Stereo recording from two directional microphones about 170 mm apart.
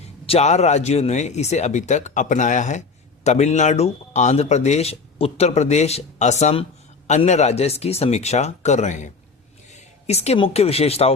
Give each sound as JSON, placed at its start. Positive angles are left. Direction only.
{"t": 0.3, "sound": "speech", "side_deg": 40}